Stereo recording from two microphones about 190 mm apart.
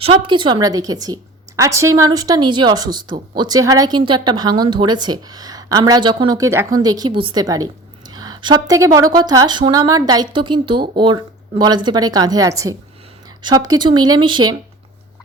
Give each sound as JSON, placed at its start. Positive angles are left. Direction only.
{"t": 0.0, "sound": "a woman's voice", "side_deg": -25}